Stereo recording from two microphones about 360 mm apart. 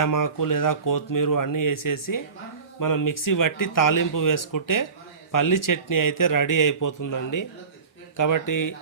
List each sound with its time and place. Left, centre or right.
0.0 s speech: left